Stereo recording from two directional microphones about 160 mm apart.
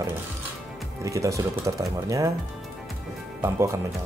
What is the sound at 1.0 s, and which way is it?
Speech, 20° right (ahead or behind).